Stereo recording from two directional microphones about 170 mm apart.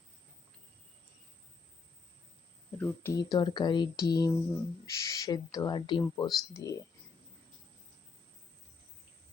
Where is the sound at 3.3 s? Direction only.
25° left (ahead or behind).